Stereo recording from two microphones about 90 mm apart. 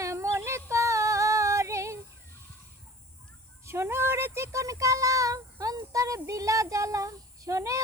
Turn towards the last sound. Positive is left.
turn(degrees=-35)  # may be behind; listen again after turning